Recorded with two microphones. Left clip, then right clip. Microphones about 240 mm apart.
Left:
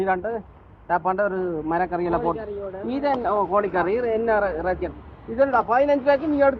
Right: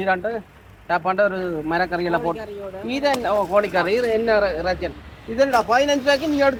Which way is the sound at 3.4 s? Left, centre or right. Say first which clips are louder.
Right 3 dB; right.